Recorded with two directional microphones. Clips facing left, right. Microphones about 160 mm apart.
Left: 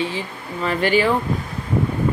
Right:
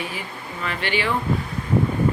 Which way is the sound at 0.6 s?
40° left (ahead or behind).